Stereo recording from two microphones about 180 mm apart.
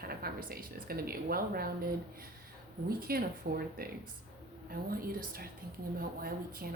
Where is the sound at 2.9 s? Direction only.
55° right (ahead or behind).